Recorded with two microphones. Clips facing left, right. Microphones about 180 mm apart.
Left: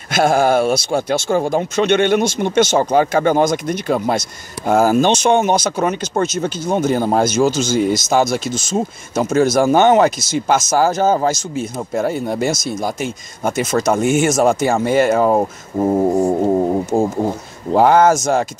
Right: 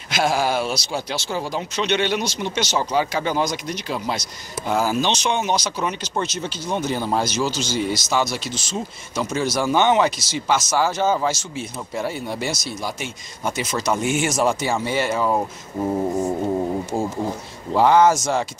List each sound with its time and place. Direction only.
0.1 s speech: 50° left (ahead or behind)
17.7 s speech: 50° left (ahead or behind)